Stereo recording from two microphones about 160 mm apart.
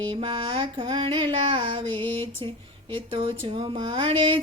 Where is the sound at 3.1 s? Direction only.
35° right (ahead or behind).